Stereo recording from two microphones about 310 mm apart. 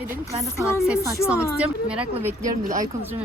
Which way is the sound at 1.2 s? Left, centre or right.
Centre.